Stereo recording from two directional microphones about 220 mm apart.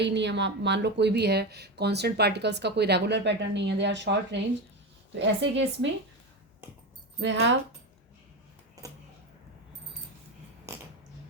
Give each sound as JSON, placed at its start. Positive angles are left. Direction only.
{"t": 0.0, "sound": "a woman's voice", "side_deg": -55}
{"t": 7.2, "sound": "a woman's voice", "side_deg": -55}